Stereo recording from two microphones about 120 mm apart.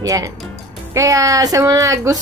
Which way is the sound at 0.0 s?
30° right (ahead or behind).